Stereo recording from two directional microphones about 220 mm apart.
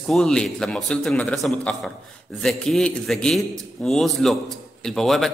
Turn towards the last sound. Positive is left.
turn(degrees=0)  # may be behind; listen again after turning